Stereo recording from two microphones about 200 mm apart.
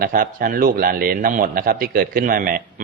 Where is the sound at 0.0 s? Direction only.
45° right (ahead or behind).